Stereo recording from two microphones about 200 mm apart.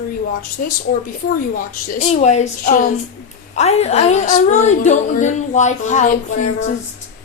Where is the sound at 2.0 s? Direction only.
35° left (ahead or behind).